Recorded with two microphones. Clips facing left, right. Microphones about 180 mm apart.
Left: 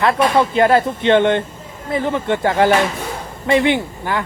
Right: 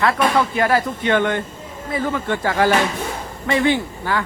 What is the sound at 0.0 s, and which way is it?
Speech, 25° left (ahead or behind).